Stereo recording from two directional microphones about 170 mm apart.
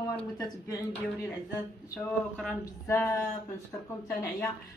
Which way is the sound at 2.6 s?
15° left (ahead or behind).